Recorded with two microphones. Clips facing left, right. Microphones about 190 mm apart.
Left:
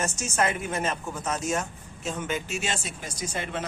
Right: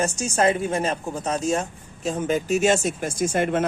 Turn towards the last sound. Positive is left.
turn(degrees=-50)  # may be behind; listen again after turning